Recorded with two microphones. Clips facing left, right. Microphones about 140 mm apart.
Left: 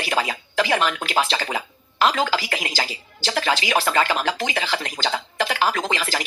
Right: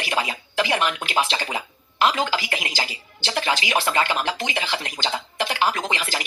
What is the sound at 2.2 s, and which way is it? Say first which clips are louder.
Speech: left 2 dB; 40° left (ahead or behind).